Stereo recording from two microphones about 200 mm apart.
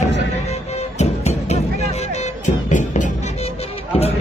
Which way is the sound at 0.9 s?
35° left (ahead or behind).